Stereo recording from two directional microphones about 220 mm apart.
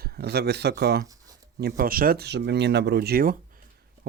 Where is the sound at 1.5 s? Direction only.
45° right (ahead or behind).